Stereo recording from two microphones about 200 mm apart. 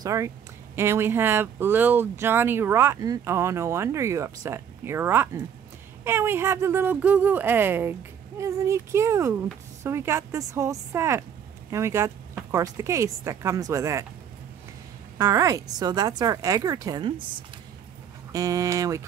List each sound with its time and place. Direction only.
0.0 s speech: 15° right (ahead or behind)
15.1 s a woman's voice: 15° right (ahead or behind)